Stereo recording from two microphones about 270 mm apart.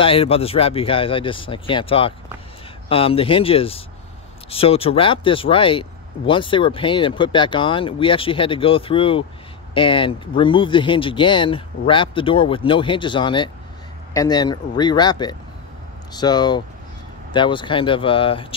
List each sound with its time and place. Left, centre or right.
0.0 s speech: left